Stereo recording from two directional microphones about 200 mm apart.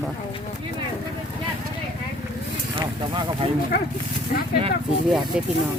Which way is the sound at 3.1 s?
25° right (ahead or behind).